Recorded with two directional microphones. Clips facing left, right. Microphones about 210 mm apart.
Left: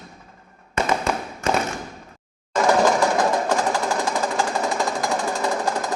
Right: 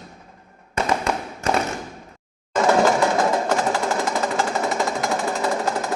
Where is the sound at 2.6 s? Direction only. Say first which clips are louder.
Right 1 dB; centre (ahead or behind).